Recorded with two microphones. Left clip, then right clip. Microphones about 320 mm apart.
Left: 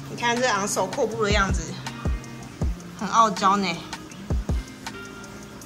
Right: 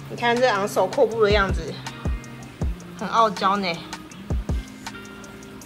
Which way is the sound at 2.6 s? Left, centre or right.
Centre.